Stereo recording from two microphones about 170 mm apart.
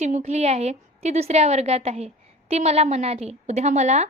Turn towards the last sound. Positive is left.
turn(degrees=-40)  # may be behind; listen again after turning